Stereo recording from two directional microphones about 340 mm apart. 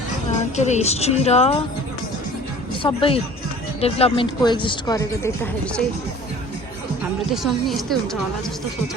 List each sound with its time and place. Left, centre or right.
0.3 s speech: centre
2.8 s speech: centre
7.7 s a woman's voice: centre